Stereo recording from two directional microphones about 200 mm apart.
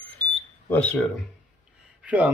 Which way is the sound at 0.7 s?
5° left (ahead or behind).